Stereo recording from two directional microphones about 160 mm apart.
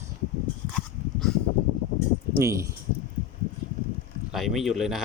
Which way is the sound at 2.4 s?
20° right (ahead or behind).